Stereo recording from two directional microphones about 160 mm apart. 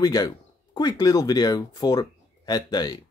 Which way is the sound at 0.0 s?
25° left (ahead or behind).